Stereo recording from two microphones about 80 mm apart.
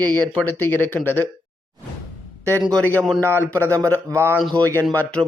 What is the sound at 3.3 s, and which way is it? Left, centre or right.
A man's voice, right.